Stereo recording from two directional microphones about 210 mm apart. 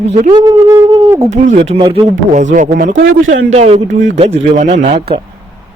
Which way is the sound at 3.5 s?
30° right (ahead or behind).